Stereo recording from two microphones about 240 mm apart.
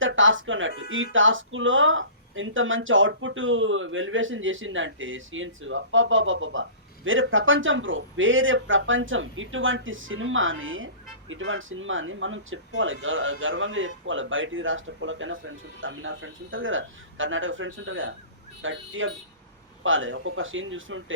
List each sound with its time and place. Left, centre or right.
0.0 s speech: right